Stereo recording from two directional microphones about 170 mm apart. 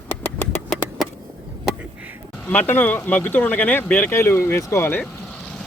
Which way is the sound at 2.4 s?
10° left (ahead or behind).